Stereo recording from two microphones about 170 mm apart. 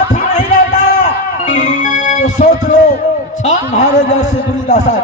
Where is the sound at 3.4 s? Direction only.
45° left (ahead or behind).